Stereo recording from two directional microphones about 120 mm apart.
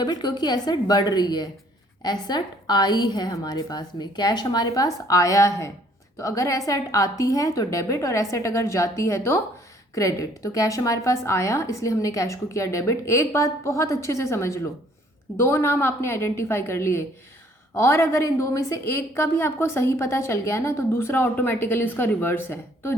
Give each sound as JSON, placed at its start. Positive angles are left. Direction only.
{"t": 0.0, "sound": "a woman's voice", "side_deg": 35}